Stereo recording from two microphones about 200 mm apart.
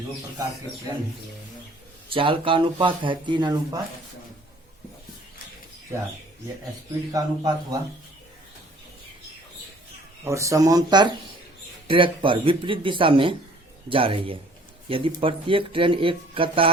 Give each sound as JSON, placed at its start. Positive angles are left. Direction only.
{"t": 2.0, "sound": "speech", "side_deg": -25}
{"t": 7.1, "sound": "speech", "side_deg": -20}
{"t": 10.2, "sound": "speech", "side_deg": -15}